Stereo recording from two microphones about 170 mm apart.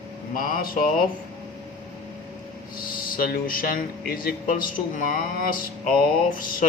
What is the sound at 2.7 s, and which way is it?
Speech, 55° left (ahead or behind).